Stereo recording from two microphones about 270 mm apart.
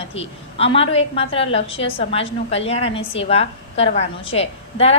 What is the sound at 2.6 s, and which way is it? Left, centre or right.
A woman's voice, left.